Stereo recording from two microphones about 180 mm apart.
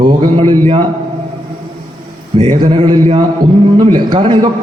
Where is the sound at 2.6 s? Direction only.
30° right (ahead or behind).